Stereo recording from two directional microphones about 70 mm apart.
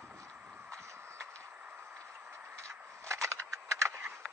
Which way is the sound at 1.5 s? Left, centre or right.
Right.